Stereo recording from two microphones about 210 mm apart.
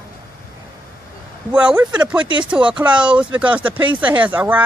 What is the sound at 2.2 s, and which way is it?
Speech, 20° right (ahead or behind).